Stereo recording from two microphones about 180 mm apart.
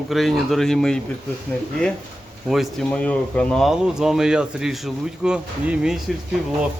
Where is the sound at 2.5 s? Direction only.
Centre (ahead or behind).